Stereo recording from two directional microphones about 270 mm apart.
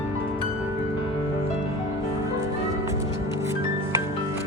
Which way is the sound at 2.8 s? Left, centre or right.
Centre.